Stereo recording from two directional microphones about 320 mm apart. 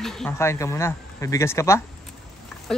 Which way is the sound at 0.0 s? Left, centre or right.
Centre.